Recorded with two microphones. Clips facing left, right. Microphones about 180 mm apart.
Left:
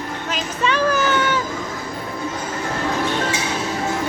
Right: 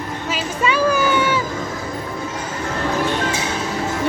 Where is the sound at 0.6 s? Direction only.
10° right (ahead or behind).